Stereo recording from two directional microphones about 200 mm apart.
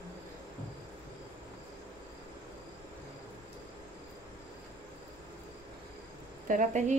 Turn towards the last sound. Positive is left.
turn(degrees=-40)  # may be behind; listen again after turning